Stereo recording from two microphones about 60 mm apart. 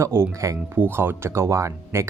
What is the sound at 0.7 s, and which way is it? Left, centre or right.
Speech, right.